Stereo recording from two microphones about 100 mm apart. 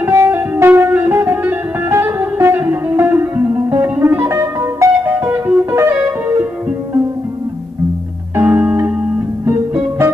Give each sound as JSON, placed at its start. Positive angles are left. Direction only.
{"t": 0.0, "sound": "music", "side_deg": -25}
{"t": 8.4, "sound": "music", "side_deg": -20}